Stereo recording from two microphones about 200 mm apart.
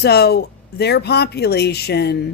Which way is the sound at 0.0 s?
55° left (ahead or behind).